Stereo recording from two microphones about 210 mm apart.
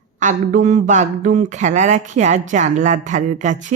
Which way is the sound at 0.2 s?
35° right (ahead or behind).